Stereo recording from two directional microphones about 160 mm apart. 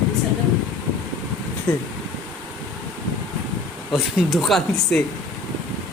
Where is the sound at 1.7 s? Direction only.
10° left (ahead or behind).